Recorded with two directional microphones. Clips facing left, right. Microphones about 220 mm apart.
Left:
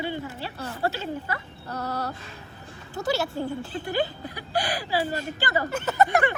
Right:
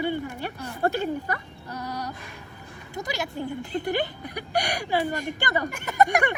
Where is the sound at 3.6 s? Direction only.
20° right (ahead or behind).